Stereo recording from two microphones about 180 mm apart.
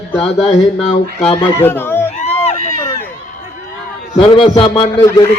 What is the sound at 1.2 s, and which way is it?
Speech, 35° left (ahead or behind).